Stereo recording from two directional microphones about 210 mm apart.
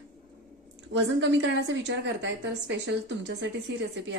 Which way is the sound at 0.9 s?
60° right (ahead or behind).